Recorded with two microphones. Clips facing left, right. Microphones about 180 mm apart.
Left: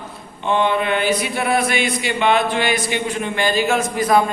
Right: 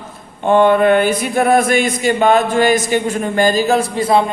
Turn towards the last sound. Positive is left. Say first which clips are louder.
# right 3 dB
turn(degrees=-30)  # may be behind; listen again after turning